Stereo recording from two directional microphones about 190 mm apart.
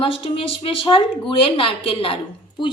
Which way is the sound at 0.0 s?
30° left (ahead or behind).